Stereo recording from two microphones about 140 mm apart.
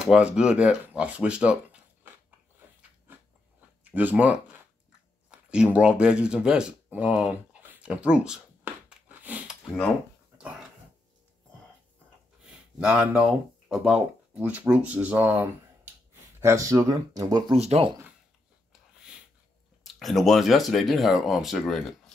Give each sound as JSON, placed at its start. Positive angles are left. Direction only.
{"t": 0.0, "sound": "speech", "side_deg": -5}
{"t": 3.9, "sound": "speech", "side_deg": -10}
{"t": 8.8, "sound": "a sound", "side_deg": -10}
{"t": 10.3, "sound": "dog", "side_deg": -5}
{"t": 12.7, "sound": "speech", "side_deg": -5}
{"t": 17.6, "sound": "speech", "side_deg": -45}
{"t": 19.8, "sound": "speech", "side_deg": 0}